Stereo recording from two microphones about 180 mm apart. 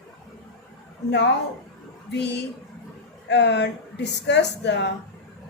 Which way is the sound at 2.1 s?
70° left (ahead or behind).